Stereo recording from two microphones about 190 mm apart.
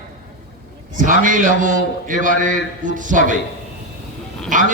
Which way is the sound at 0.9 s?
45° right (ahead or behind).